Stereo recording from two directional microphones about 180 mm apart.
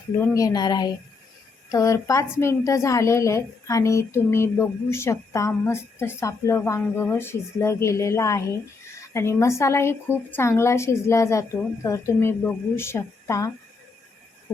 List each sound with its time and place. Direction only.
0.2 s a woman's voice: 20° left (ahead or behind)